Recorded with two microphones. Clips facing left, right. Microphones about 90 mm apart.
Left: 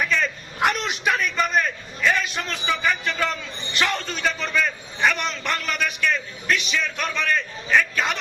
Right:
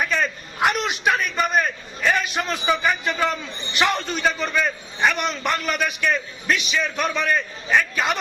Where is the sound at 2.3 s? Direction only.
15° right (ahead or behind).